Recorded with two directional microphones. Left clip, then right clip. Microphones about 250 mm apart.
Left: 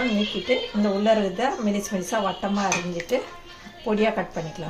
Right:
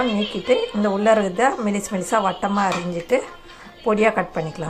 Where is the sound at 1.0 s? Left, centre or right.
Centre.